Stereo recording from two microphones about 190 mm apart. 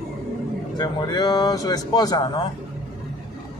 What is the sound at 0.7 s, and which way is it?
Speech, 20° left (ahead or behind).